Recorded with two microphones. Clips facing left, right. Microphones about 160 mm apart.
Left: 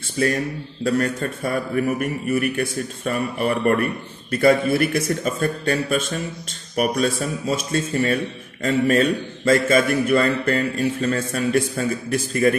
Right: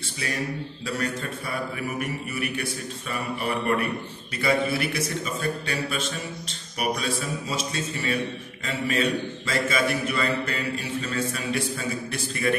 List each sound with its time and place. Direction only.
0.8 s a man's voice: 50° left (ahead or behind)